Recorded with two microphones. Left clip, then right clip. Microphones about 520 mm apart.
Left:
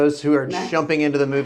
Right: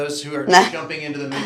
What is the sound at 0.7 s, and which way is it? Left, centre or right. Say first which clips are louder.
Speech: left 8 dB; left.